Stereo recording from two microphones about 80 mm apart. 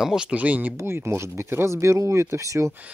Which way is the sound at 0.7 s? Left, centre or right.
Right.